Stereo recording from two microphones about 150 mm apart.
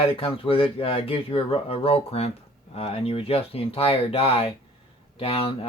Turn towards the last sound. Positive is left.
turn(degrees=40)  # may be behind; listen again after turning